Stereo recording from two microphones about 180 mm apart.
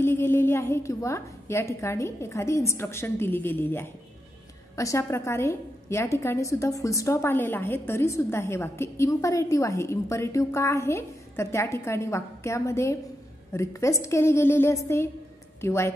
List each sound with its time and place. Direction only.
0.0 s a woman's voice: 15° left (ahead or behind)